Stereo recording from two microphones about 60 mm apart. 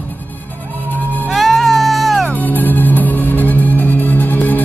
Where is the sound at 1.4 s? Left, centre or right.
Centre.